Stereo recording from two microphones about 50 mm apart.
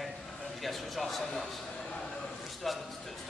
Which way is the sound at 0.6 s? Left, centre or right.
Centre.